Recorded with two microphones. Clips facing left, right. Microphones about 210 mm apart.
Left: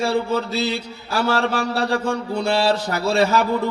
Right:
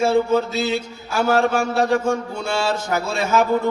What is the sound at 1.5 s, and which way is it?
A man's voice, 35° left (ahead or behind).